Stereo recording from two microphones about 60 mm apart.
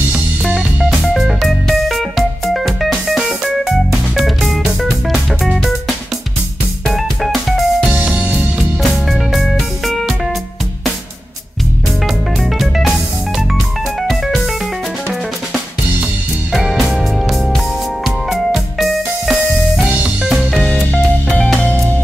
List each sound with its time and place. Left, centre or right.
0.8 s music: centre
6.9 s music: centre
7.9 s music: right
8.5 s music: centre
12.4 s music: centre
16.7 s music: centre
21.3 s music: centre
21.5 s music: left